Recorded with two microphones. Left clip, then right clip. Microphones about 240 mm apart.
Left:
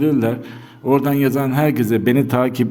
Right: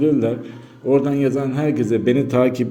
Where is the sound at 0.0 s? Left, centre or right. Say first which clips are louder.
Even; left.